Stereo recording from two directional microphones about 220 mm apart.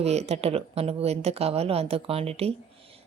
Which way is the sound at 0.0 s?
30° right (ahead or behind).